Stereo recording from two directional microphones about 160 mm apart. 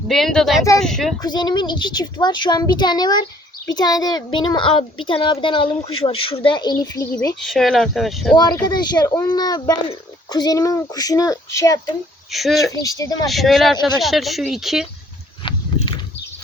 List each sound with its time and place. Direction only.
0.1 s speech: centre (ahead or behind)
1.2 s a child's voice: 25° left (ahead or behind)
7.3 s speech: centre (ahead or behind)
8.6 s speech: 25° left (ahead or behind)
12.3 s speech: centre (ahead or behind)
12.7 s speech: 20° left (ahead or behind)
13.2 s speech: centre (ahead or behind)
15.4 s a sound: 30° left (ahead or behind)